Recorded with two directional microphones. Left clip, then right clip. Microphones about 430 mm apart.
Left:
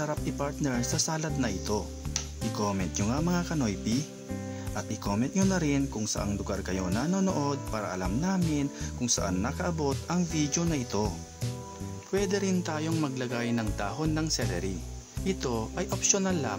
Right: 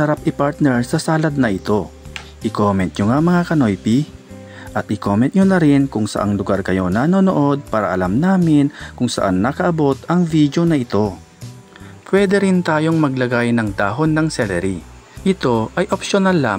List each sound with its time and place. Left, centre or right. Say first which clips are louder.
0.0 s speech: right 15 dB; left
12.1 s speech: right 14 dB; left